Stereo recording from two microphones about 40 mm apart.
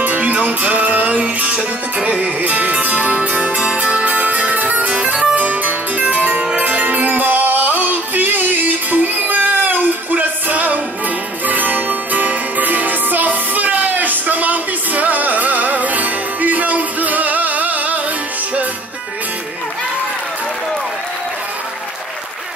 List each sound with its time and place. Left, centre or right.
0.0 s music: right
4.1 s music: right